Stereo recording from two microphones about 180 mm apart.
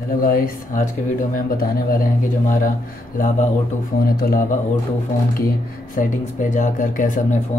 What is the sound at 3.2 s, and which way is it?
Speech, 50° left (ahead or behind).